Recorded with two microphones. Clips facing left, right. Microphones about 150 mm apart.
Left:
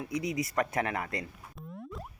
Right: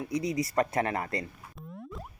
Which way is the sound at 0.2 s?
20° left (ahead or behind).